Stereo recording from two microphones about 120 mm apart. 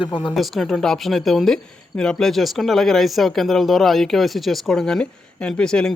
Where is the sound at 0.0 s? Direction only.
45° left (ahead or behind).